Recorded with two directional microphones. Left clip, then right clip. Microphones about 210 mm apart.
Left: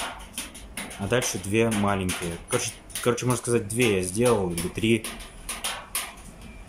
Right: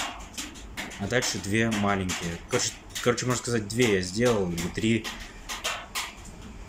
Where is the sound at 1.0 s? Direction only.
10° left (ahead or behind).